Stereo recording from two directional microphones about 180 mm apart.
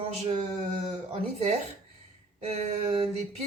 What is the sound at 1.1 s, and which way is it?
A woman's voice, 35° right (ahead or behind).